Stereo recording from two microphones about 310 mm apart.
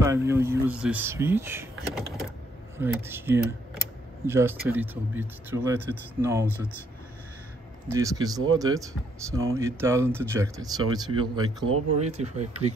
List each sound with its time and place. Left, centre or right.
0.0 s speech: centre
7.9 s speech: centre